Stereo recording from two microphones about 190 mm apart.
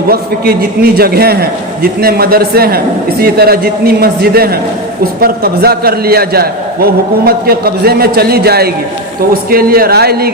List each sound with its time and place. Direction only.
0.1 s a man's voice: 55° right (ahead or behind)